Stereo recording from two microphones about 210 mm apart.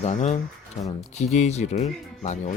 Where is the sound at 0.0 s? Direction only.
35° left (ahead or behind).